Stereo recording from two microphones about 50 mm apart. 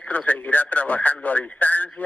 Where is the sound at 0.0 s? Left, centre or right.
Left.